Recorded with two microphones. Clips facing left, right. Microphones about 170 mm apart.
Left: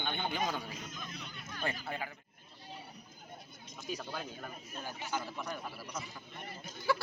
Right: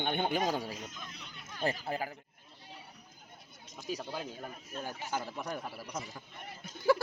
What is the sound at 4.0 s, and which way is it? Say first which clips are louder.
Speech: right 2 dB; 25° right (ahead or behind).